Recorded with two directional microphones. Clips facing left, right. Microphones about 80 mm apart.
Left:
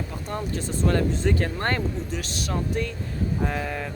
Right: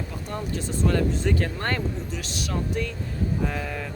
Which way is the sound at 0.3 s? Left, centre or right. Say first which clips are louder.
Left 1 dB; left.